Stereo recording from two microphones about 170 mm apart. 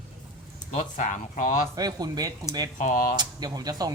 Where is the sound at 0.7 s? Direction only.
50° left (ahead or behind).